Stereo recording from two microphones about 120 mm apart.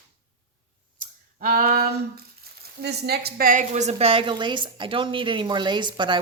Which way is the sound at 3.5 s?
70° right (ahead or behind).